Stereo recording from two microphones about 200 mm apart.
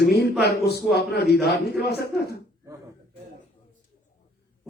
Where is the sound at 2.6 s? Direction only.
15° right (ahead or behind).